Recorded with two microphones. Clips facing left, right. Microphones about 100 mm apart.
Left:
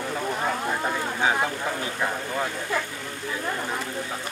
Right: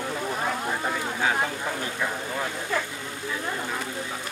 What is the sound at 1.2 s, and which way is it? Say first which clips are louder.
Speech: left 2 dB; 15° left (ahead or behind).